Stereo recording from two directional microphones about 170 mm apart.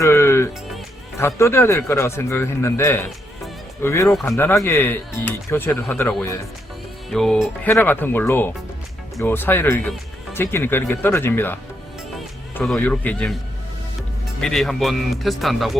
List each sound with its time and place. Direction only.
0.0 s music: 15° left (ahead or behind)
1.2 s speech: 15° left (ahead or behind)
7.1 s speech: centre (ahead or behind)
7.7 s speech: 10° left (ahead or behind)
12.5 s speech: 5° left (ahead or behind)
14.4 s speech: centre (ahead or behind)